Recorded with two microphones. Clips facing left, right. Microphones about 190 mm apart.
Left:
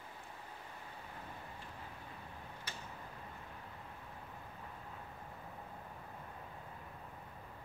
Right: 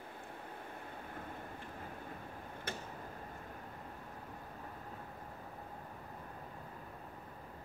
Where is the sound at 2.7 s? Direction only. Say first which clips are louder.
Right 9 dB; 55° right (ahead or behind).